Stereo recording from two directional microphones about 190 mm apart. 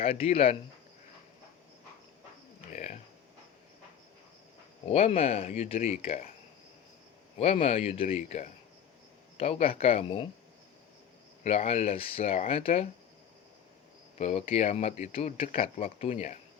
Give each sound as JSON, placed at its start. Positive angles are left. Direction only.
{"t": 0.0, "sound": "speech", "side_deg": 30}
{"t": 2.7, "sound": "a sound", "side_deg": 35}
{"t": 4.9, "sound": "speech", "side_deg": 30}
{"t": 7.3, "sound": "speech", "side_deg": 35}
{"t": 11.4, "sound": "speech", "side_deg": 35}
{"t": 14.2, "sound": "speech", "side_deg": 35}